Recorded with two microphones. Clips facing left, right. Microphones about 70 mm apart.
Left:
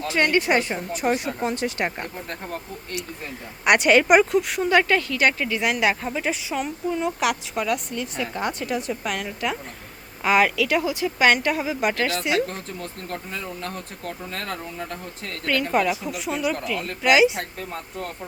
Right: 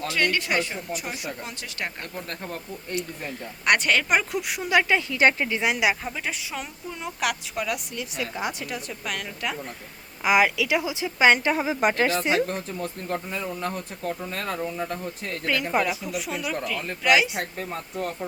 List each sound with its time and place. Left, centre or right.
0.1 s a woman's voice: left
1.0 s speech: left
1.5 s a woman's voice: left
3.7 s speech: centre
4.3 s a woman's voice: centre
5.1 s speech: right
5.8 s a woman's voice: centre
10.2 s speech: centre; by 12.4 s right
12.5 s speech: centre
14.0 s a woman's voice: centre
15.9 s a woman's voice: centre